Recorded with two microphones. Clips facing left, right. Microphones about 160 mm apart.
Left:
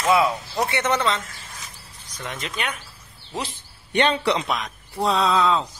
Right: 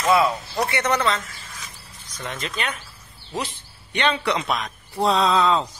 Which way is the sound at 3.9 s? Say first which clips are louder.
Left 2 dB; 45° left (ahead or behind).